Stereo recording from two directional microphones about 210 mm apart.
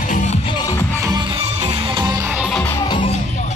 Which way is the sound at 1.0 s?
20° right (ahead or behind).